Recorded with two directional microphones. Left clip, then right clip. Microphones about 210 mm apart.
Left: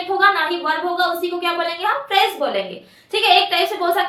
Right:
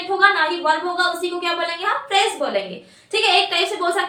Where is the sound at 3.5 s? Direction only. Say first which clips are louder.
Left 2 dB; 20° left (ahead or behind).